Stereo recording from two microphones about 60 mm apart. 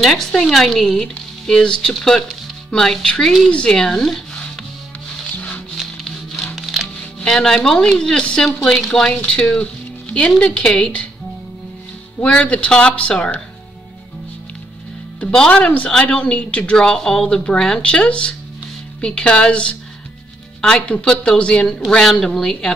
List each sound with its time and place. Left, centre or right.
0.0 s speech: centre
5.3 s music: left
5.8 s music: centre
7.2 s speech: centre
9.1 s speech: centre
12.2 s speech: centre
15.1 s speech: centre